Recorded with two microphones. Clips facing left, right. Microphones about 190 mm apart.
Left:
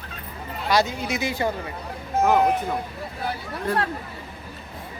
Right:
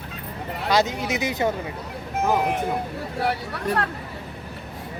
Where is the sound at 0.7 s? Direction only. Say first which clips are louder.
Right 1 dB; 20° right (ahead or behind).